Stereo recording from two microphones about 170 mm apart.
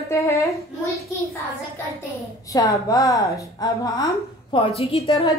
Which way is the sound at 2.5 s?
20° left (ahead or behind).